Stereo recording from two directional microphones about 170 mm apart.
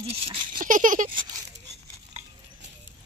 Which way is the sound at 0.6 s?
50° right (ahead or behind).